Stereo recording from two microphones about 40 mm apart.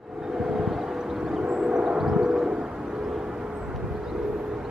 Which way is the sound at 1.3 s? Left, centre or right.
Centre.